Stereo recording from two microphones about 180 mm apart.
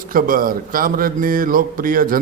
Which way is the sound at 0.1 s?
50° right (ahead or behind).